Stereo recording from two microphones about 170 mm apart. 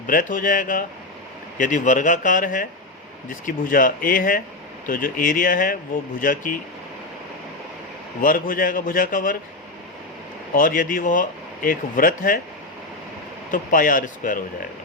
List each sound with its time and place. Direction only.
0.1 s speech: 55° left (ahead or behind)
8.2 s speech: 55° left (ahead or behind)
10.5 s speech: 55° left (ahead or behind)
13.5 s speech: 50° left (ahead or behind)